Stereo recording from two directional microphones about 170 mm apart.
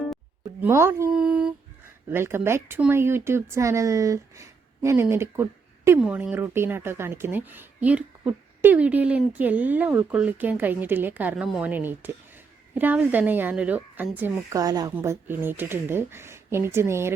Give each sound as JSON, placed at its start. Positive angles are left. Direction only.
{"t": 0.6, "sound": "speech", "side_deg": -15}
{"t": 6.0, "sound": "speech", "side_deg": -5}
{"t": 14.6, "sound": "speech", "side_deg": -20}